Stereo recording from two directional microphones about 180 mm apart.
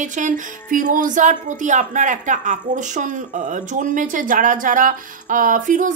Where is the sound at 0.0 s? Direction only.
45° right (ahead or behind).